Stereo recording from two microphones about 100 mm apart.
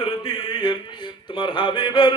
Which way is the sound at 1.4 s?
55° left (ahead or behind).